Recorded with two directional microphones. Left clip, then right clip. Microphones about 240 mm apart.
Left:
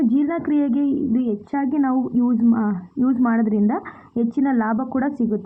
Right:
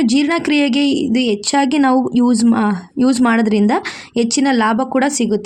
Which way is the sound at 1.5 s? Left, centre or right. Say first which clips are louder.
Right 7 dB; right.